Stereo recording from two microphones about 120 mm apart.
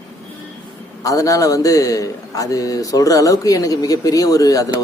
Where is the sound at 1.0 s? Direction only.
30° left (ahead or behind).